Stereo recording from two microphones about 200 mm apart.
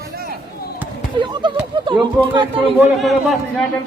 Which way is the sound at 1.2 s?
25° right (ahead or behind).